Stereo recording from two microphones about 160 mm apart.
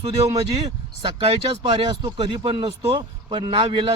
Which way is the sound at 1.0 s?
30° right (ahead or behind).